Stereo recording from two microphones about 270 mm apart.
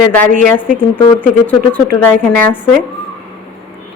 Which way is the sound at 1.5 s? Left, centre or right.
Centre.